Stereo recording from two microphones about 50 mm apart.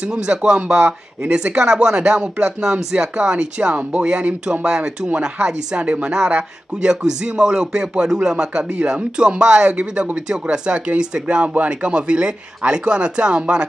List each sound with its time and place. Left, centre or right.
0.0 s speech: right
11.4 s speech: right